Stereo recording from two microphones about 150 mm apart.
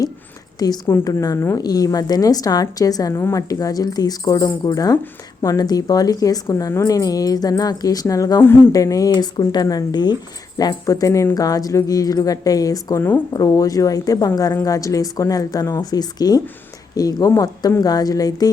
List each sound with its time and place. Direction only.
0.9 s a woman's voice: 20° left (ahead or behind)